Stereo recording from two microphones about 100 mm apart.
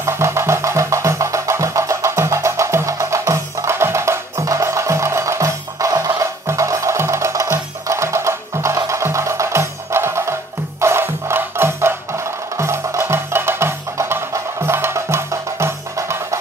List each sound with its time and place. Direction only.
0.0 s music: 25° right (ahead or behind)